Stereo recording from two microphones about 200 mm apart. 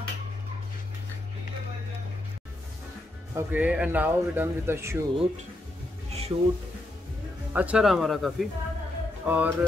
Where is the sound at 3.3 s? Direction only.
10° right (ahead or behind).